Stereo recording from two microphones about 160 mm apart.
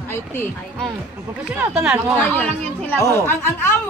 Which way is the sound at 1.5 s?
10° right (ahead or behind).